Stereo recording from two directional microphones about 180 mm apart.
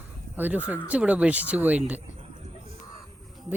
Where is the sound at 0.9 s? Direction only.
5° right (ahead or behind).